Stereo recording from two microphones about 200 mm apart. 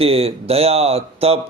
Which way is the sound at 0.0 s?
30° right (ahead or behind).